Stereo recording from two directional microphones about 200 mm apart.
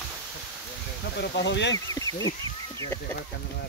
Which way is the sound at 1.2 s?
60° left (ahead or behind).